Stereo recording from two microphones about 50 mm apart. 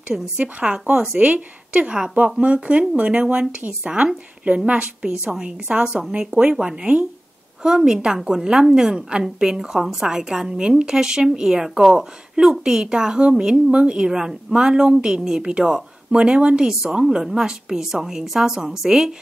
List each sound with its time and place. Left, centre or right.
0.4 s a woman's voice: right
6.5 s a woman's voice: centre